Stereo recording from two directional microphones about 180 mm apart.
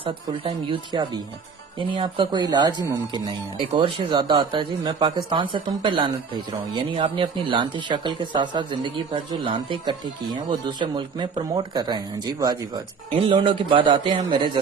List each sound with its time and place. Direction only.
0.0 s speech: 30° right (ahead or behind)